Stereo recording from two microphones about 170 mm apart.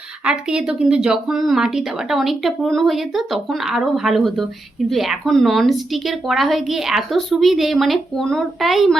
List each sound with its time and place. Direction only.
0.3 s speech: 5° right (ahead or behind)